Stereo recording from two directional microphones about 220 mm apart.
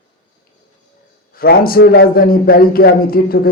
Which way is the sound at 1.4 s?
45° left (ahead or behind).